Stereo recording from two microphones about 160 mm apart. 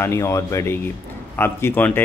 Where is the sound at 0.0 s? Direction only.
15° left (ahead or behind).